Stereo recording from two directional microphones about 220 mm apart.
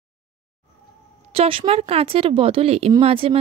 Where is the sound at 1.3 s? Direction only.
25° right (ahead or behind).